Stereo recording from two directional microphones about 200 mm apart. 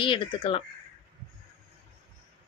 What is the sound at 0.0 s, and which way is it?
Speech, 25° left (ahead or behind).